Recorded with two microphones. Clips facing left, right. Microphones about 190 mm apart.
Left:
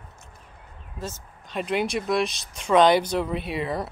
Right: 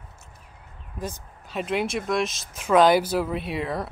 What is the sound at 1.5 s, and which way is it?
Speech, centre (ahead or behind).